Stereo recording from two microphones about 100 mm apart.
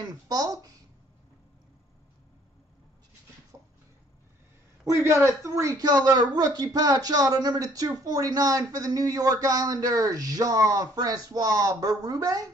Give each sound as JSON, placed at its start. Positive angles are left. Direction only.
{"t": 0.0, "sound": "a woman's voice", "side_deg": -40}
{"t": 4.8, "sound": "a woman's voice", "side_deg": -30}